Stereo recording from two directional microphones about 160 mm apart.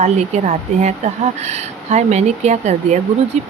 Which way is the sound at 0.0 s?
45° right (ahead or behind).